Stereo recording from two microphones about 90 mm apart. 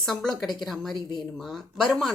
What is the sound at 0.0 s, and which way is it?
A woman's voice, 5° left (ahead or behind).